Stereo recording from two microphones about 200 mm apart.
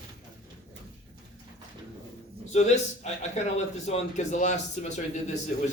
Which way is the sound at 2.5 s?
35° left (ahead or behind).